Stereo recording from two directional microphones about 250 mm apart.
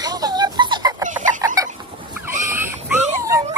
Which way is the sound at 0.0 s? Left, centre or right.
Centre.